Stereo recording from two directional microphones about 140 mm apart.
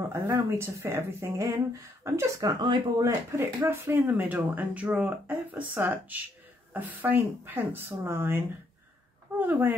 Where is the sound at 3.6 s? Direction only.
15° right (ahead or behind).